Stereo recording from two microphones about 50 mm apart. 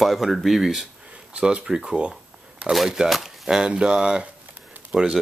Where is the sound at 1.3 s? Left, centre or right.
Centre.